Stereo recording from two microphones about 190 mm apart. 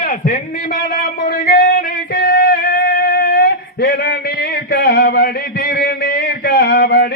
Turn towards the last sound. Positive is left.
turn(degrees=55)  # may be behind; listen again after turning